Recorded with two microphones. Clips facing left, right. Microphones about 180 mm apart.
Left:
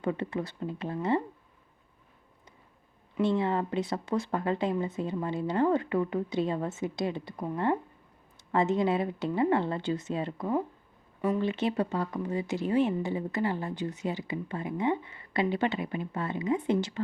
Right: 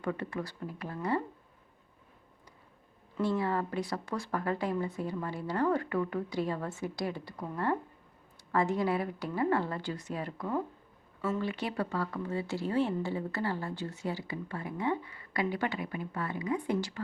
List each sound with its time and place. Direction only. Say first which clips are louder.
0.0 s speech: left 4 dB; 20° left (ahead or behind)
3.2 s speech: left 3 dB; 20° left (ahead or behind)